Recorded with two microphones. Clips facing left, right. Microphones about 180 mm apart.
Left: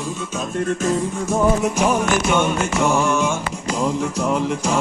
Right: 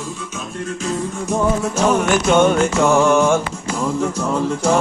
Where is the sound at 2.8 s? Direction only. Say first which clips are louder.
Right 5 dB; 85° right.